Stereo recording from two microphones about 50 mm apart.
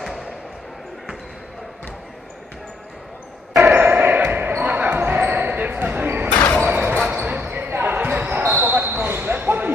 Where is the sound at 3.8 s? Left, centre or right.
Right.